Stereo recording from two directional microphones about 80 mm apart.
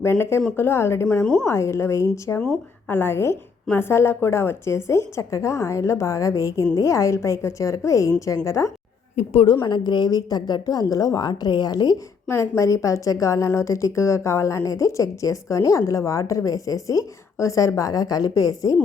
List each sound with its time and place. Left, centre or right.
0.0 s a woman's voice: left
1.2 s a woman's voice: centre
1.5 s a woman's voice: left
9.6 s a woman's voice: left
12.3 s a woman's voice: left